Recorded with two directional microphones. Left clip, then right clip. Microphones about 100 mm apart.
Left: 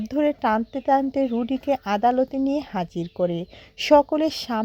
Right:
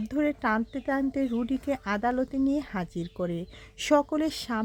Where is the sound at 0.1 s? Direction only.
30° left (ahead or behind).